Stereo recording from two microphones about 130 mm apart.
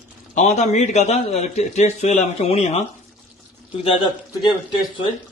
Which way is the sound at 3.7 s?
45° left (ahead or behind).